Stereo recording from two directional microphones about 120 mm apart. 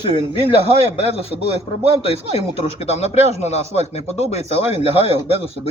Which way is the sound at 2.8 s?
60° left (ahead or behind).